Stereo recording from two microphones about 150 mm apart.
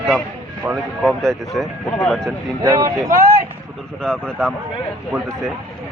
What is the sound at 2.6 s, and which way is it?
Speech, 20° right (ahead or behind).